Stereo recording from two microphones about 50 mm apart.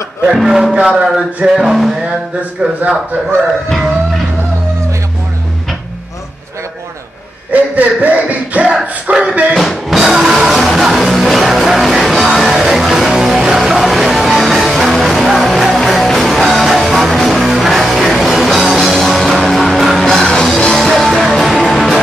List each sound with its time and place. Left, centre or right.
0.3 s a sound: centre
1.6 s music: centre
2.6 s speech: right
3.6 s music: centre
7.7 s music: right
9.2 s speech: right
9.6 s music: centre